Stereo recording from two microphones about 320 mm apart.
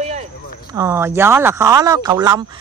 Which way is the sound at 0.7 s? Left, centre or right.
Centre.